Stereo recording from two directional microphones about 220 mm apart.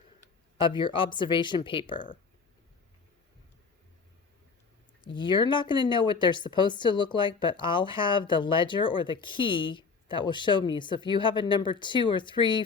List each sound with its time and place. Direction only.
0.6 s speech: 20° left (ahead or behind)
5.0 s speech: 20° left (ahead or behind)